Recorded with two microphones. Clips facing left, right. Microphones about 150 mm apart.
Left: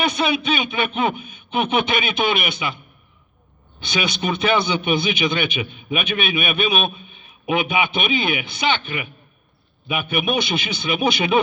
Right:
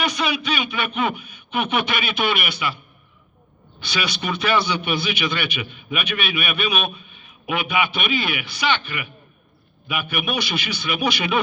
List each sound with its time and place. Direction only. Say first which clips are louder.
0.0 s a man's voice: left 3 dB; 25° left (ahead or behind)
3.8 s a man's voice: left 3 dB; 20° left (ahead or behind)